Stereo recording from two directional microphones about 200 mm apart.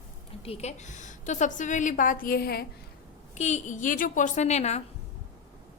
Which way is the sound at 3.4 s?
35° left (ahead or behind).